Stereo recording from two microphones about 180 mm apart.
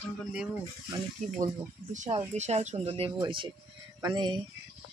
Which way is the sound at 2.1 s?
40° right (ahead or behind).